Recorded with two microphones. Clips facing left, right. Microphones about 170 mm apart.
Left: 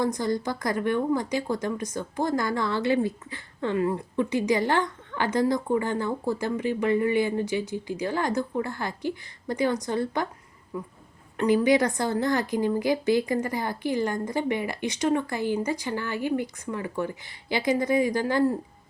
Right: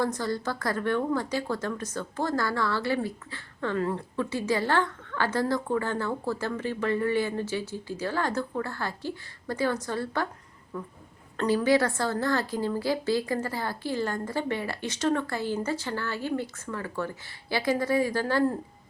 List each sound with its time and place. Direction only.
0.0 s speech: 15° left (ahead or behind)